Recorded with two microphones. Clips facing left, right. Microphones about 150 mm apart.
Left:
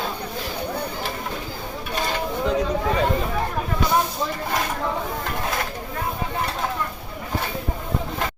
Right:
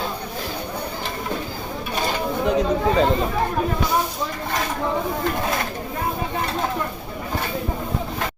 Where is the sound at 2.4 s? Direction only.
20° right (ahead or behind).